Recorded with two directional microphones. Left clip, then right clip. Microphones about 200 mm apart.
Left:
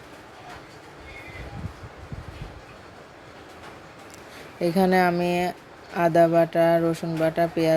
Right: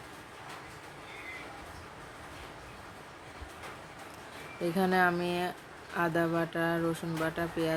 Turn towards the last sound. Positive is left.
turn(degrees=25)  # may be behind; listen again after turning